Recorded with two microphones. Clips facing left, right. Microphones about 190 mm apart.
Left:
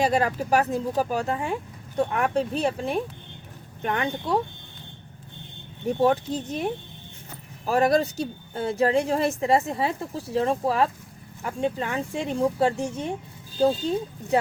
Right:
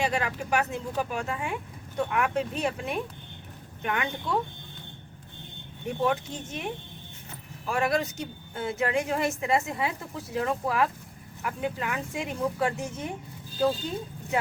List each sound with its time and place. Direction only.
0.0 s speech: 40° left (ahead or behind)
6.0 s speech: 35° left (ahead or behind)